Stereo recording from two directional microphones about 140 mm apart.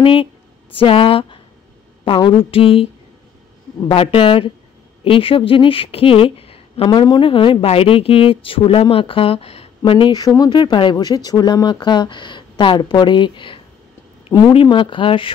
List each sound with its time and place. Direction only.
0.0 s speech: 40° left (ahead or behind)
3.9 s speech: 40° left (ahead or behind)